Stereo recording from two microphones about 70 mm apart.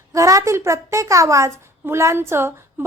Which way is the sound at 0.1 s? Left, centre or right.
Right.